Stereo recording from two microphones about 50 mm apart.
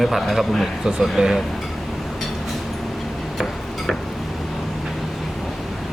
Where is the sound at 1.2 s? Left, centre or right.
Centre.